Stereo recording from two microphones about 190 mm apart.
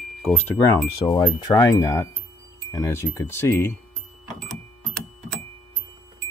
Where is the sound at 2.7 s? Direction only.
15° left (ahead or behind).